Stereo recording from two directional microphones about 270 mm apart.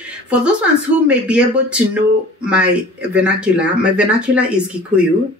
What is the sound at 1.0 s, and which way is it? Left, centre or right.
Speech, centre.